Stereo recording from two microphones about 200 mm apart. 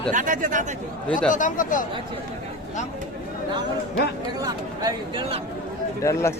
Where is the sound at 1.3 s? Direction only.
40° left (ahead or behind).